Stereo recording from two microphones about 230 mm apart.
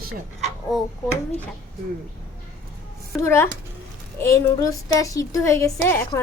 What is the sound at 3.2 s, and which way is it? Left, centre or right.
A woman's voice, centre.